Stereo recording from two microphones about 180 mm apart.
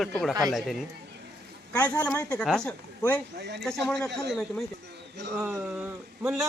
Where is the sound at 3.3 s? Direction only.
70° right (ahead or behind).